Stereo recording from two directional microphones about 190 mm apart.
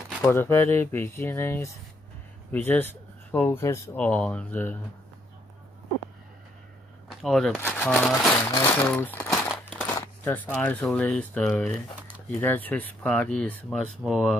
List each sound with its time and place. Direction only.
0.2 s speech: 10° left (ahead or behind)
7.1 s speech: centre (ahead or behind)
9.5 s a sound: 5° left (ahead or behind)
9.9 s speech: 10° left (ahead or behind)